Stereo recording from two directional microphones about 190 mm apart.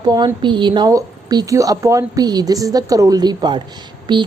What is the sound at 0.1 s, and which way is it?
A woman's voice, 25° right (ahead or behind).